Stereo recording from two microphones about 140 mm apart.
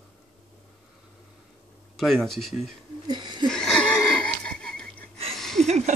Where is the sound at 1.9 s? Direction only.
Centre (ahead or behind).